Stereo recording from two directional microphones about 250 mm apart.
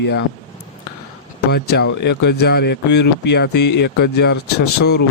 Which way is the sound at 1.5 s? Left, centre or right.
Left.